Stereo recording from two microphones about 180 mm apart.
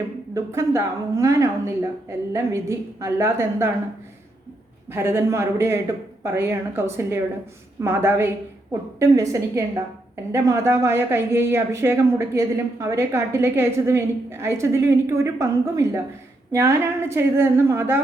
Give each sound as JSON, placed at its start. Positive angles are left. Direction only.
{"t": 0.3, "sound": "speech", "side_deg": -15}
{"t": 4.9, "sound": "speech", "side_deg": -15}
{"t": 9.3, "sound": "speech", "side_deg": -15}